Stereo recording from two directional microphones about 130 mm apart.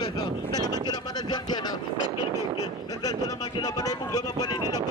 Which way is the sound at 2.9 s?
30° left (ahead or behind).